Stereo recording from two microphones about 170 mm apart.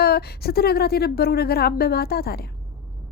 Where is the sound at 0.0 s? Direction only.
65° left (ahead or behind).